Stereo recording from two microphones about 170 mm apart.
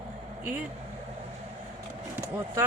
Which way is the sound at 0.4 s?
10° right (ahead or behind).